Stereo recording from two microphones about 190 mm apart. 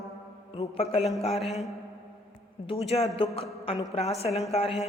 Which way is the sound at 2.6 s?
30° left (ahead or behind).